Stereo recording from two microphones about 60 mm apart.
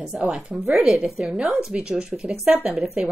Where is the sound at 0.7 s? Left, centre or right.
Centre.